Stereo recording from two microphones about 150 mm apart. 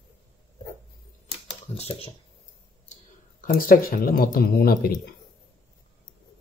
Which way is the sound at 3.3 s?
70° left (ahead or behind).